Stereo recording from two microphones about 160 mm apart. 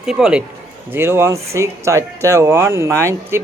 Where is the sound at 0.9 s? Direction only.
15° right (ahead or behind).